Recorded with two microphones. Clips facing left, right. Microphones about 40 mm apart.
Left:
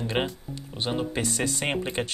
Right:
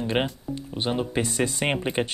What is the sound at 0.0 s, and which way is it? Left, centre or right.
Speech, centre.